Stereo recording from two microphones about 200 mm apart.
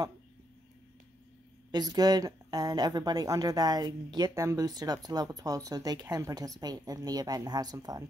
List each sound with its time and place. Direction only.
1.7 s speech: 20° right (ahead or behind)